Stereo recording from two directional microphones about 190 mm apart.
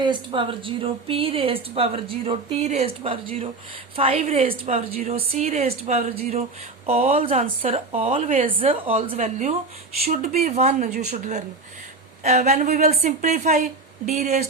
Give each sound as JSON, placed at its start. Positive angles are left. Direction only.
{"t": 0.0, "sound": "speech", "side_deg": -25}
{"t": 10.0, "sound": "speech", "side_deg": -50}
{"t": 10.6, "sound": "speech", "side_deg": -35}